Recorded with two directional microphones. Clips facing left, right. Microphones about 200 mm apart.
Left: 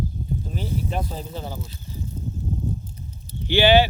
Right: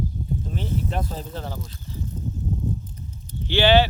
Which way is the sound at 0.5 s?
5° left (ahead or behind).